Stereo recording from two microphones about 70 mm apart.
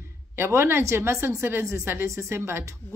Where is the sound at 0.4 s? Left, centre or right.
Right.